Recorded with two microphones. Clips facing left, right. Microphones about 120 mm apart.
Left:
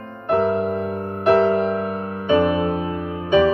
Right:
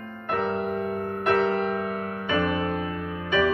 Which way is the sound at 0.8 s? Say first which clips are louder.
Left 6 dB; 25° left (ahead or behind).